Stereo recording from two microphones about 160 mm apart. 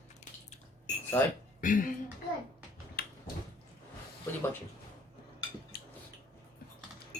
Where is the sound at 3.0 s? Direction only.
80° left.